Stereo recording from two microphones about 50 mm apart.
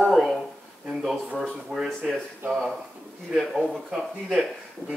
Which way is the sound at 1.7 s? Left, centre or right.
Centre.